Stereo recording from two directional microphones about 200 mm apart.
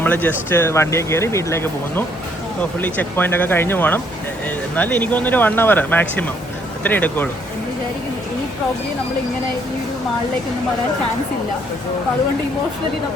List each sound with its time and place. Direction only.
0.0 s speech: 10° left (ahead or behind)